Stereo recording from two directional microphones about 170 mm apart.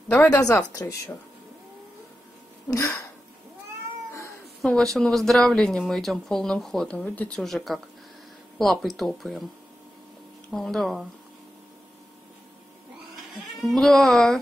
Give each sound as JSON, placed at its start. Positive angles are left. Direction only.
{"t": 0.3, "sound": "speech", "side_deg": 20}
{"t": 2.7, "sound": "speech", "side_deg": 15}
{"t": 4.6, "sound": "speech", "side_deg": 5}
{"t": 10.5, "sound": "speech", "side_deg": 0}
{"t": 13.6, "sound": "speech", "side_deg": 0}